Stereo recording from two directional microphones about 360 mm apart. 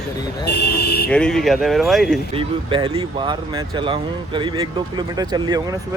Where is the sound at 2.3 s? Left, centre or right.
Centre.